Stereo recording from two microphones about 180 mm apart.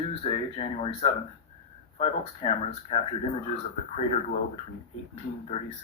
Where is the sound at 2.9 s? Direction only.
35° left (ahead or behind).